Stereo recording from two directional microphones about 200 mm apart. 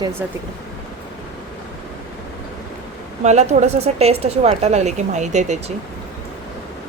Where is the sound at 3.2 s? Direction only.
35° right (ahead or behind).